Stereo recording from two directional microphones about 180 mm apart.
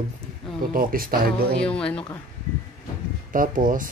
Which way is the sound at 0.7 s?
55° right (ahead or behind).